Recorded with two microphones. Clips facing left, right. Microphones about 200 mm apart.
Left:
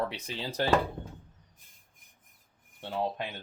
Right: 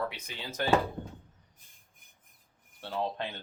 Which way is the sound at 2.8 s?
15° left (ahead or behind).